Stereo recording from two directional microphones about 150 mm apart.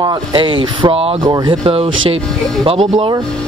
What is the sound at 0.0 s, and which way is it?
Speech, 30° right (ahead or behind).